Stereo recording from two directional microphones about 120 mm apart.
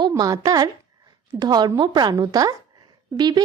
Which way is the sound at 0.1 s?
30° right (ahead or behind).